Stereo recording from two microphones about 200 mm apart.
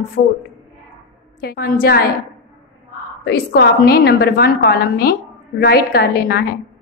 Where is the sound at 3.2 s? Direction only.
55° left (ahead or behind).